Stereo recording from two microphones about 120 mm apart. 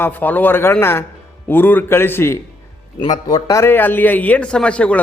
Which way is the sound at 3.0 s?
35° left (ahead or behind).